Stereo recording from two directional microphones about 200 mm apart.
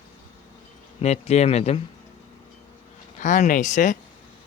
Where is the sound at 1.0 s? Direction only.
30° left (ahead or behind).